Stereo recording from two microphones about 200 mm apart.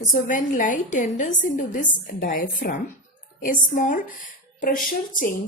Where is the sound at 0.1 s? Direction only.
40° left (ahead or behind).